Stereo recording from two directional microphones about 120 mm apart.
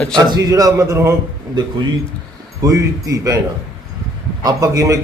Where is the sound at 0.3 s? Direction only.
30° right (ahead or behind).